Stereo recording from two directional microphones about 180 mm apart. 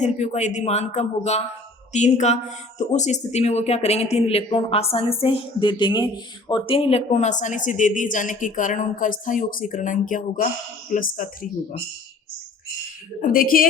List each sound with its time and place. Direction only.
0.0 s a woman's voice: 40° left (ahead or behind)
13.2 s a woman's voice: 50° left (ahead or behind)